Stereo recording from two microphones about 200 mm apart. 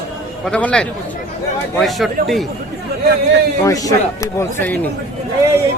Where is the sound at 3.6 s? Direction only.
15° left (ahead or behind).